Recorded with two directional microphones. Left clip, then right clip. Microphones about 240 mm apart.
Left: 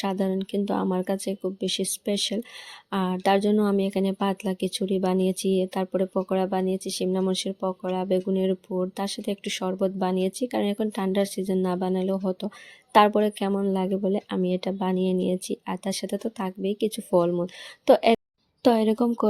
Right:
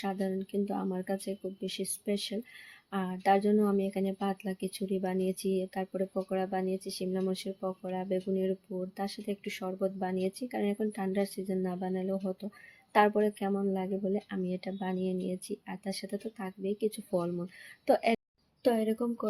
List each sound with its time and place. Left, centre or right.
0.0 s speech: left